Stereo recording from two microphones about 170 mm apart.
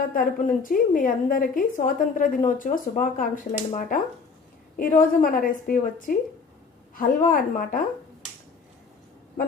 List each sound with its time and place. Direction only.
0.0 s a woman's voice: 55° left (ahead or behind)